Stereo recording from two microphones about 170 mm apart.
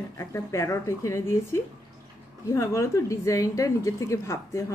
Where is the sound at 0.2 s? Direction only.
15° left (ahead or behind).